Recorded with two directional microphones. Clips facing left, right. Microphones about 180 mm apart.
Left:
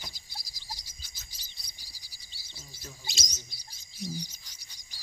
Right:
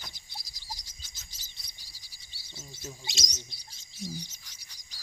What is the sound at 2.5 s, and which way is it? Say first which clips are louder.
Bird: right 5 dB; 20° right (ahead or behind).